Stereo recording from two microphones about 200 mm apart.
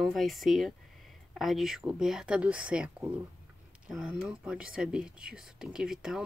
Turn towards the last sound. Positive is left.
turn(degrees=-5)  # may be behind; listen again after turning